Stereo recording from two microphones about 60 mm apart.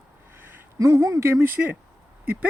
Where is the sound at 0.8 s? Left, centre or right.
Right.